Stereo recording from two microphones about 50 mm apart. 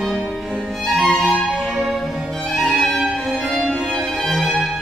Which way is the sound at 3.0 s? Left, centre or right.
Centre.